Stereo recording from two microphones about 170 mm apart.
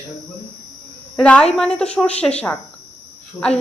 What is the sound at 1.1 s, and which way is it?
A woman's voice, 5° left (ahead or behind).